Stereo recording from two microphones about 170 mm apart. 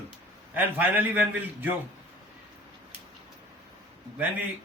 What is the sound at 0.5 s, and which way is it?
A man's voice, 10° right (ahead or behind).